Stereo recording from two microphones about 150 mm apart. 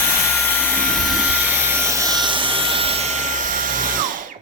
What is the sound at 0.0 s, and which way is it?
Vacuum cleaner, 15° left (ahead or behind).